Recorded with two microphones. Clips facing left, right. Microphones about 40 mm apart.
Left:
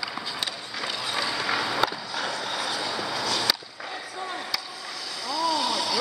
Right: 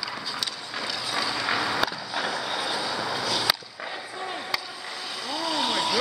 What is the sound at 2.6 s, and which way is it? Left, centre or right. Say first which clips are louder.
Vehicle: right 1 dB; centre.